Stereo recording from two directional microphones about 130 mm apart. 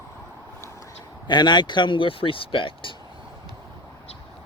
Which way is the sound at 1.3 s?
35° left (ahead or behind).